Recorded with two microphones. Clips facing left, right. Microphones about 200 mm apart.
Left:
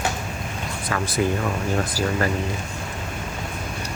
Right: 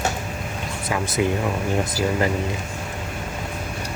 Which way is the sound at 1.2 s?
15° right (ahead or behind).